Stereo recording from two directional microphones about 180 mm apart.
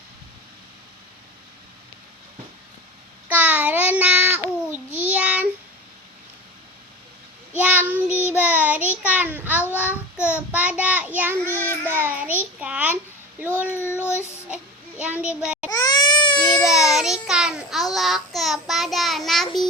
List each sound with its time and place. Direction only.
3.2 s babbling: 10° right (ahead or behind)
7.5 s child singing: 10° right (ahead or behind)
11.6 s child singing: 10° left (ahead or behind)
11.9 s child singing: 10° right (ahead or behind)
13.7 s child singing: 15° left (ahead or behind)
14.5 s a sound: 5° right (ahead or behind)
15.7 s baby cry: 20° left (ahead or behind)
16.6 s child singing: centre (ahead or behind)